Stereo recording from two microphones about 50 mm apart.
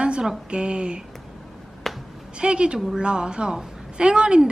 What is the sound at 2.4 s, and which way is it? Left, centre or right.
A woman's voice, centre.